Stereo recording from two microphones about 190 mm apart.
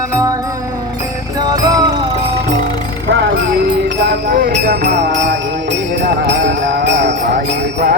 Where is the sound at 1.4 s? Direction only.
20° right (ahead or behind).